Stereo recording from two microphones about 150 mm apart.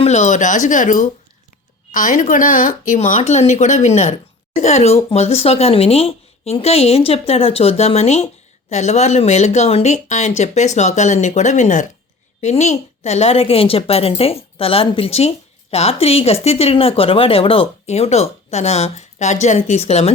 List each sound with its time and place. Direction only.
0.0 s a woman's voice: 50° left (ahead or behind)